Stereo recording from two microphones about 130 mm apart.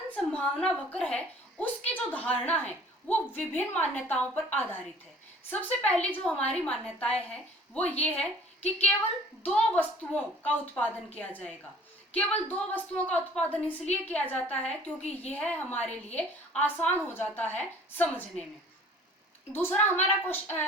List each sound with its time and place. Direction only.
0.2 s a woman's voice: 5° left (ahead or behind)
19.5 s a woman's voice: 15° left (ahead or behind)